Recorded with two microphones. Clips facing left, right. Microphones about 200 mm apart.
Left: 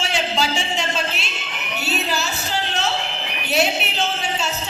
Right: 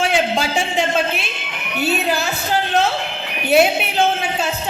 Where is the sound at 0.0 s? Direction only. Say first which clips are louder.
Right 5 dB; 55° right (ahead or behind).